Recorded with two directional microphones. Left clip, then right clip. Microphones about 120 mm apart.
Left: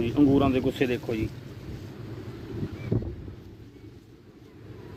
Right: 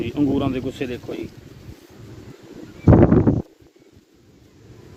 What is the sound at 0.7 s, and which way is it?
Speech, 25° right (ahead or behind).